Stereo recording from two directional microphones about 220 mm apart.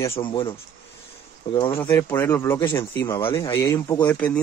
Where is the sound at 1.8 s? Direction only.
10° left (ahead or behind).